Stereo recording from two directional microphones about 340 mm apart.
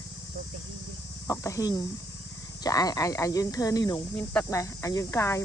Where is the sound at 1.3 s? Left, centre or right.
Centre.